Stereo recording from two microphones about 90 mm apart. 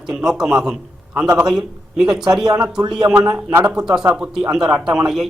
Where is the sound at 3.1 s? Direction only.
20° right (ahead or behind).